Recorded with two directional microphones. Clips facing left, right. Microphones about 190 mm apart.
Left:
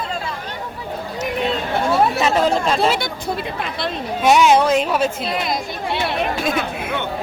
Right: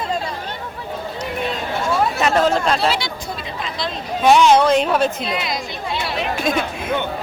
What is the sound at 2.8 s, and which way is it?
Speech, 50° left (ahead or behind).